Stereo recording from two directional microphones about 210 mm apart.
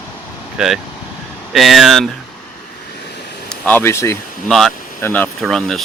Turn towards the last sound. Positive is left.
turn(degrees=0)  # may be behind; listen again after turning